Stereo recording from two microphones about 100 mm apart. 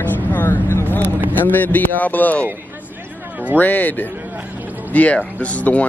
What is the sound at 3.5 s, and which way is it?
Speech, 15° left (ahead or behind).